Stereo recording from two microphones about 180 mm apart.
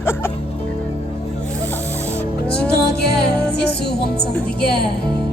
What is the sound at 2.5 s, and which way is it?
Music, 65° left (ahead or behind).